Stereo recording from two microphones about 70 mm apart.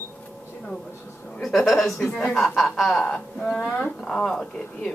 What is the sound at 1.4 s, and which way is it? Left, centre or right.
A woman's voice, centre.